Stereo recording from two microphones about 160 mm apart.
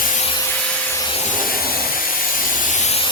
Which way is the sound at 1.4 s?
65° left (ahead or behind).